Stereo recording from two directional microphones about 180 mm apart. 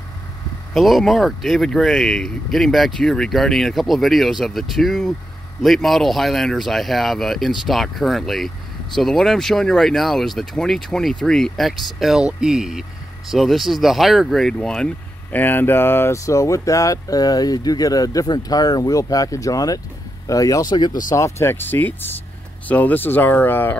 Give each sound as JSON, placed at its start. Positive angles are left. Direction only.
{"t": 0.7, "sound": "speech", "side_deg": 0}